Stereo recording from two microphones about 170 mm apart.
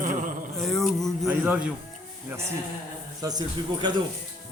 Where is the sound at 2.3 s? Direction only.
10° right (ahead or behind).